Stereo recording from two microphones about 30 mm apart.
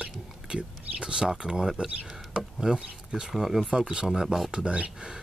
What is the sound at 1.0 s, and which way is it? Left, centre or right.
Speech, right.